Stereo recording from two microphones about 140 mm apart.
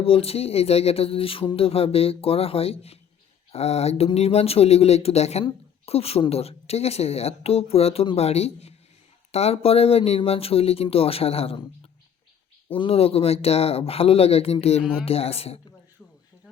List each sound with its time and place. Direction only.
0.0 s speech: 45° left (ahead or behind)
12.6 s speech: 40° left (ahead or behind)